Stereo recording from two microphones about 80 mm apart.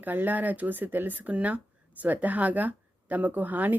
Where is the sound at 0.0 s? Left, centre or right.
Right.